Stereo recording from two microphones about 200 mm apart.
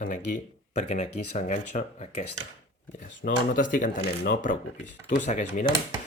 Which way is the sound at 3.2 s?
40° left (ahead or behind).